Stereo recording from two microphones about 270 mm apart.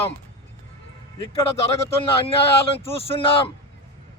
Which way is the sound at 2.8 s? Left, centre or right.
Left.